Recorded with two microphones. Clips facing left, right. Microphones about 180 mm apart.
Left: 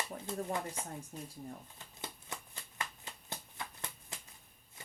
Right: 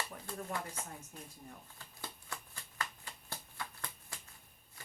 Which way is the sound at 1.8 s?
20° left (ahead or behind).